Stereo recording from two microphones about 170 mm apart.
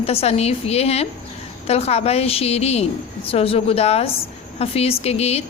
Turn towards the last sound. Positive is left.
turn(degrees=35)  # may be behind; listen again after turning